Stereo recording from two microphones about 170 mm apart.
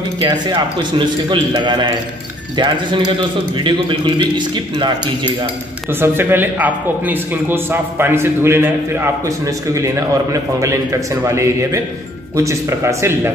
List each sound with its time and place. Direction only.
0.2 s a man's voice: 25° right (ahead or behind)
5.9 s a man's voice: 15° right (ahead or behind)